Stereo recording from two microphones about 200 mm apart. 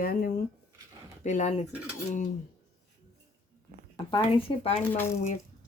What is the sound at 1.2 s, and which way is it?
Speech, 35° left (ahead or behind).